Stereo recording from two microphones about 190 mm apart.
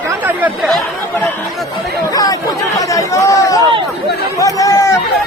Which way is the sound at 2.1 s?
20° left (ahead or behind).